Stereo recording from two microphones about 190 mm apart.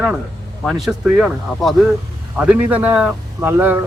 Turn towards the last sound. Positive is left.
turn(degrees=-10)  # may be behind; listen again after turning